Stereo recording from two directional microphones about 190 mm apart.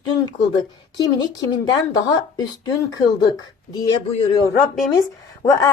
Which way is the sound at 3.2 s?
20° left (ahead or behind).